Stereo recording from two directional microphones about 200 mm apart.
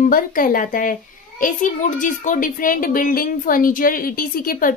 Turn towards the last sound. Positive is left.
turn(degrees=45)  # may be behind; listen again after turning